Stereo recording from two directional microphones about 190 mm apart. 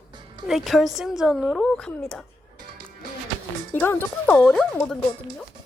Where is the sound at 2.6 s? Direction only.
50° right (ahead or behind).